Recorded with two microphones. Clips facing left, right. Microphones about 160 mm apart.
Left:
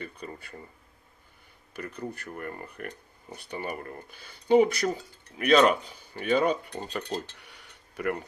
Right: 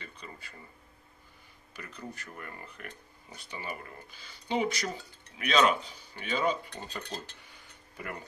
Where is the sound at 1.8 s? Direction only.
60° left (ahead or behind).